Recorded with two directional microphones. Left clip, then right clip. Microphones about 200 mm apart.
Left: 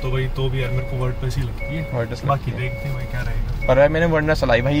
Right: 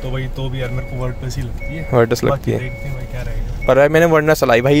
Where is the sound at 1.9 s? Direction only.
60° right (ahead or behind).